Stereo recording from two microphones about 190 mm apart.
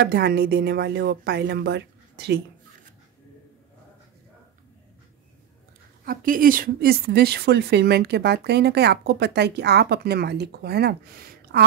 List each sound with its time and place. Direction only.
0.0 s a woman's voice: 55° right (ahead or behind)
6.0 s a woman's voice: 50° right (ahead or behind)